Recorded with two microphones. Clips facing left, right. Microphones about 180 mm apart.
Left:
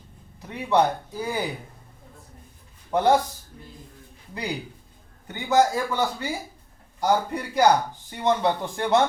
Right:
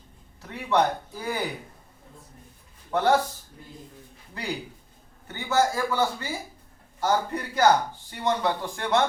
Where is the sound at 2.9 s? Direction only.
15° left (ahead or behind).